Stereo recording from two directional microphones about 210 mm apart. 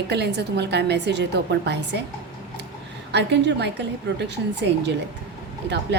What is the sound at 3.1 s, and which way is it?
Speech, 55° right (ahead or behind).